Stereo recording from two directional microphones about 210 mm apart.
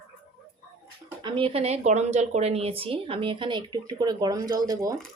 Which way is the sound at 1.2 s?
25° right (ahead or behind).